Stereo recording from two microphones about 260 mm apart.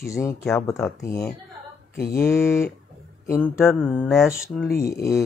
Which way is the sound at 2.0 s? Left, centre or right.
Left.